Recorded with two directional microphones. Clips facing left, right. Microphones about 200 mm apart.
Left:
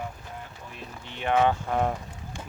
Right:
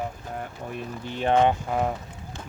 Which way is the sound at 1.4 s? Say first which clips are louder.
Right 2 dB; 10° right (ahead or behind).